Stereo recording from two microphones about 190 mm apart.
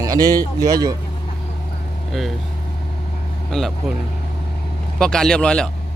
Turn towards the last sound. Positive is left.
turn(degrees=5)  # may be behind; listen again after turning